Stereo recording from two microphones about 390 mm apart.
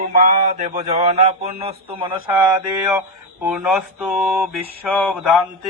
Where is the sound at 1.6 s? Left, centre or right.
Centre.